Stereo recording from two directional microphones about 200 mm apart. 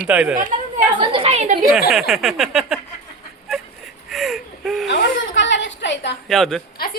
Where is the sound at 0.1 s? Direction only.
5° right (ahead or behind).